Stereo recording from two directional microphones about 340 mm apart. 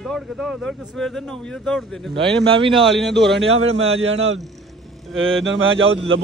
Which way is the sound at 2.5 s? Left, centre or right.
Centre.